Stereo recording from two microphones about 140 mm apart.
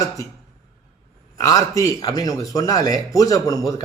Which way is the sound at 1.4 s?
25° left (ahead or behind).